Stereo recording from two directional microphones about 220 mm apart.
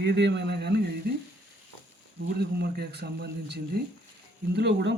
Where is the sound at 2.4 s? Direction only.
45° right (ahead or behind).